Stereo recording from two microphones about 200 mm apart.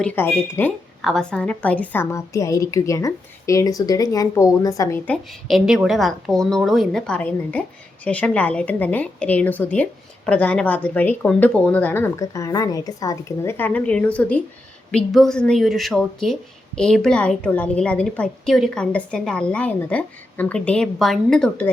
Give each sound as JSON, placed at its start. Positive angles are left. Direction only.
{"t": 0.0, "sound": "a woman's voice", "side_deg": 10}